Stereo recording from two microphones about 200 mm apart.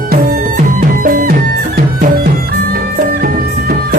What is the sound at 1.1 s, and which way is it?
Music, 45° right (ahead or behind).